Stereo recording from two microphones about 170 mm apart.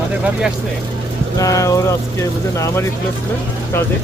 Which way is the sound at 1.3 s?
20° left (ahead or behind).